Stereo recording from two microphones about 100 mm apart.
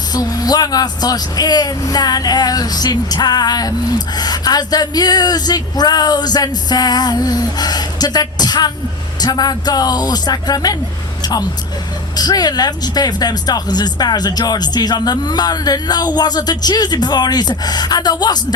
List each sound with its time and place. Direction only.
0.1 s speech: 40° left (ahead or behind)
11.2 s vehicle: 40° left (ahead or behind)
12.1 s speech: 40° left (ahead or behind)